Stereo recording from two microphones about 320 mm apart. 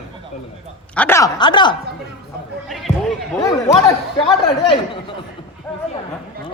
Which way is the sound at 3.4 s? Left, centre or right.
Centre.